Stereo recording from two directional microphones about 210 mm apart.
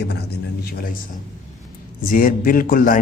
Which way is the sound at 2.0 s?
40° left (ahead or behind).